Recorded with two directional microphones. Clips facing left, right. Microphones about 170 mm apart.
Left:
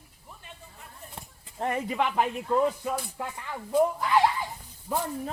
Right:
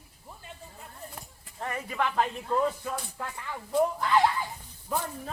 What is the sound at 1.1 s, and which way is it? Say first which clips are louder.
Speech: left 1 dB; 30° left (ahead or behind).